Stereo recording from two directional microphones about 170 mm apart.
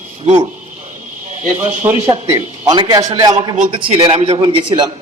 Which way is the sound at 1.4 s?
45° right (ahead or behind).